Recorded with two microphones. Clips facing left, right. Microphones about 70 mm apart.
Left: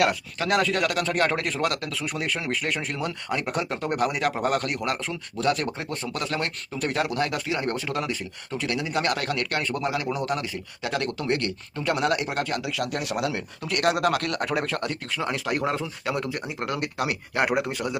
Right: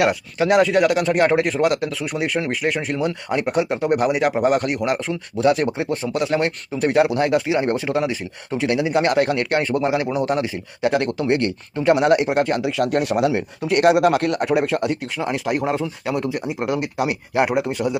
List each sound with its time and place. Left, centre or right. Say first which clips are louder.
0.0 s speech: right 5 dB; centre
3.2 s speech: right 7 dB; right
13.1 s speech: right 8 dB; right; by 17.9 s centre